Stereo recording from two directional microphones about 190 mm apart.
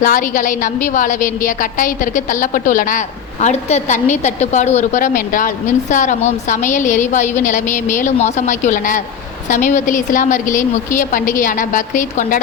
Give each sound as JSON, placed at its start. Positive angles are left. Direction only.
{"t": 0.0, "sound": "a woman's voice", "side_deg": 45}